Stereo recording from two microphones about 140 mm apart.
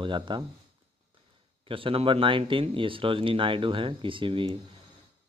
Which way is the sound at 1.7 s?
40° right (ahead or behind).